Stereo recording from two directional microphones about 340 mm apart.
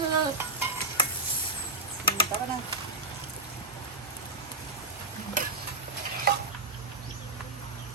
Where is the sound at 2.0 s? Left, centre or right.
Centre.